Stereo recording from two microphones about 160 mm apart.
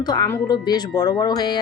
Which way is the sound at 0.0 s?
25° left (ahead or behind).